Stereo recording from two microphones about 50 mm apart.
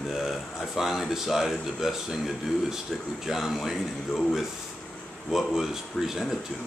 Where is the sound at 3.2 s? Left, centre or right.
Centre.